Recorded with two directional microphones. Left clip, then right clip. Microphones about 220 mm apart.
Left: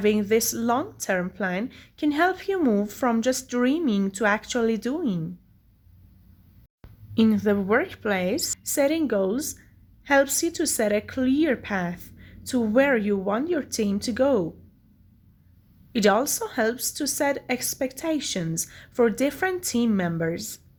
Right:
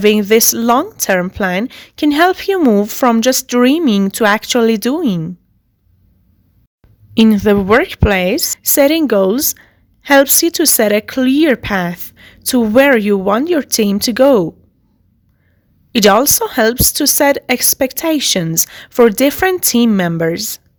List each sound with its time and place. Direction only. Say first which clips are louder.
0.0 s a woman's voice: right 12 dB; 45° right (ahead or behind)
7.1 s a woman's voice: right 11 dB; 40° right (ahead or behind)
15.9 s a woman's voice: right 12 dB; 45° right (ahead or behind)